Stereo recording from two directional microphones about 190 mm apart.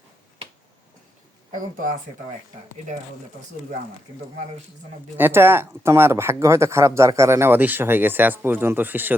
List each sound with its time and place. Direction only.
5.1 s speech: 10° right (ahead or behind)